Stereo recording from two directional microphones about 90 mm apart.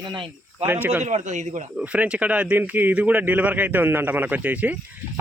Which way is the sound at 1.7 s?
15° right (ahead or behind).